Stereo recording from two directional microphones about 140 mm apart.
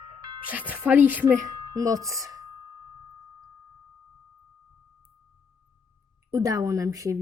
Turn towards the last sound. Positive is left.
turn(degrees=-25)  # may be behind; listen again after turning